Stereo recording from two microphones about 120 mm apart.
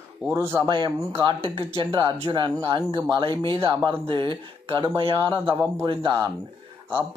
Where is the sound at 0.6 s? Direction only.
40° right (ahead or behind).